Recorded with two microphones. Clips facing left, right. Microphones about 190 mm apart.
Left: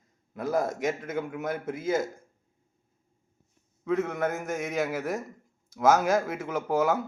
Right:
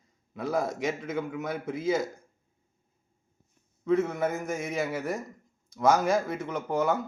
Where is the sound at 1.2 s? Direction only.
5° left (ahead or behind).